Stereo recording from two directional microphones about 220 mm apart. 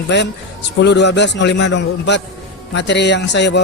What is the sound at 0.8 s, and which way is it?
A man's voice, 55° left (ahead or behind).